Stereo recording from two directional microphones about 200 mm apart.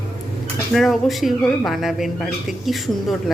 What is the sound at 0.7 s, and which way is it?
A woman's voice, centre (ahead or behind).